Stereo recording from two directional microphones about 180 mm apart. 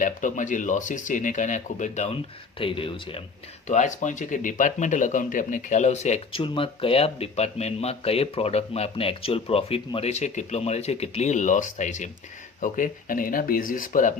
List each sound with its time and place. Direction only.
0.0 s speech: 45° left (ahead or behind)
2.6 s speech: 30° left (ahead or behind)
3.7 s speech: 40° left (ahead or behind)